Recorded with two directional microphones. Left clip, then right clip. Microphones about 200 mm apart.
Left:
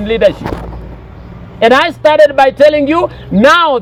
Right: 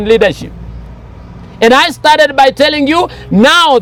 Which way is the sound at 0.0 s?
80° right.